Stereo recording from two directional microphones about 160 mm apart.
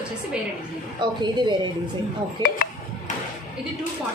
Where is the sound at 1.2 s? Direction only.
30° right (ahead or behind).